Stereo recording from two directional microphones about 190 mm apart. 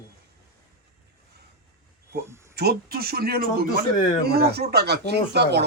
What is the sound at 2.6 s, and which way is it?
Speech, 55° right (ahead or behind).